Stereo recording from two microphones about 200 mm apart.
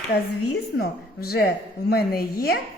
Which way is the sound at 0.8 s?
50° left (ahead or behind).